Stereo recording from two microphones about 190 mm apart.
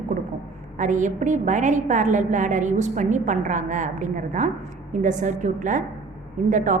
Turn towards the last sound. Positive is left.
turn(degrees=-40)  # may be behind; listen again after turning